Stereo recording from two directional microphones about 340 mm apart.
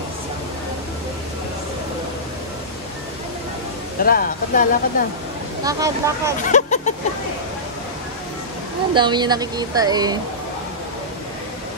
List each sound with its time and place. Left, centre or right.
4.0 s speech: left
5.6 s speech: centre
6.4 s speech: left
8.9 s speech: centre